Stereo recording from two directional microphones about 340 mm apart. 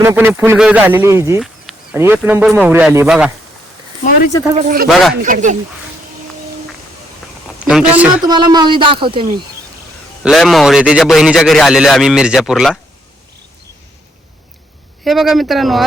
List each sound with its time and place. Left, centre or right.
0.0 s speech: centre
4.5 s speech: right
7.6 s a man's voice: centre
10.2 s speech: centre
15.0 s speech: centre